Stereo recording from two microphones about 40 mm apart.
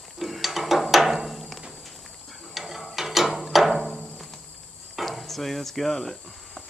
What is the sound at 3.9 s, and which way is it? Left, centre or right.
Music, centre.